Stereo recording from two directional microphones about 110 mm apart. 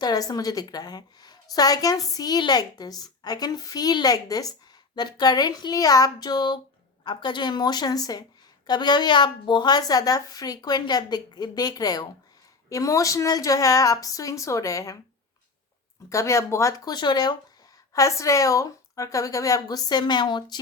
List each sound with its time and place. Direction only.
0.0 s a woman's voice: 35° left (ahead or behind)
16.0 s speech: 30° left (ahead or behind)
17.9 s a woman's voice: 30° left (ahead or behind)